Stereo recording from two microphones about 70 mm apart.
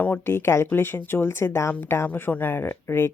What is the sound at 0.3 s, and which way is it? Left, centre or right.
Speech, left.